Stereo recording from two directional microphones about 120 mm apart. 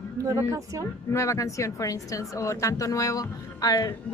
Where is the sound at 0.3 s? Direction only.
25° right (ahead or behind).